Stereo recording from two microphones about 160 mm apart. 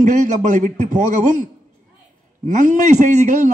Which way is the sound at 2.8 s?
50° right (ahead or behind).